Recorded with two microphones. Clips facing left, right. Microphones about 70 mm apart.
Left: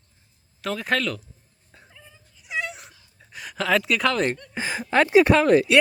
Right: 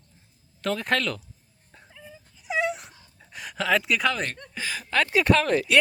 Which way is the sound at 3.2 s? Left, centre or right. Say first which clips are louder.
Left 1 dB; centre.